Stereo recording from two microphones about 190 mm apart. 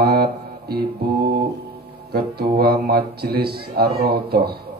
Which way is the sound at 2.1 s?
55° right (ahead or behind).